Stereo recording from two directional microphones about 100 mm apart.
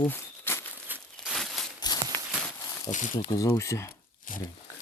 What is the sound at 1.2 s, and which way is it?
Crumpling, centre (ahead or behind).